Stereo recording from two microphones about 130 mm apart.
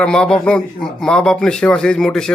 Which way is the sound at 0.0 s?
5° left (ahead or behind).